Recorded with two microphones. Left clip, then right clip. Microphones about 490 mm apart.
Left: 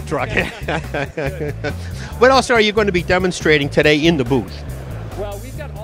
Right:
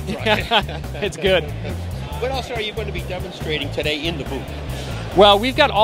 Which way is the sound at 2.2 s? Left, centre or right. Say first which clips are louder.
Left 13 dB; left.